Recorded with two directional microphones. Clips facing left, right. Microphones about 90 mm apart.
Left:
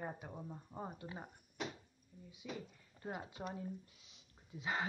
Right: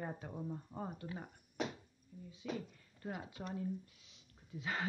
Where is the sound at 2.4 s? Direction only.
90° right.